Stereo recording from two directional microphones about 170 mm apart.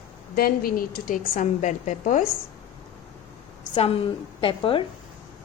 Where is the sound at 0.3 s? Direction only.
60° left (ahead or behind).